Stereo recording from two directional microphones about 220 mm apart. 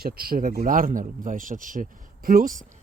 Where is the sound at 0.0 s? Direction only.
40° right (ahead or behind).